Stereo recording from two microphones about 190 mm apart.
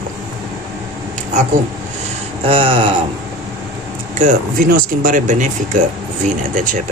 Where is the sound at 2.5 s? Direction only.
30° right (ahead or behind).